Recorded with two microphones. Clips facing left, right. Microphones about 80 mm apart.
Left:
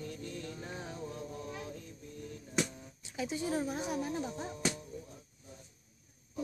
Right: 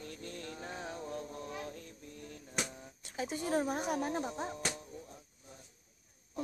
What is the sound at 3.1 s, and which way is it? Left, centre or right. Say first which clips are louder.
Speech: right 1 dB; right.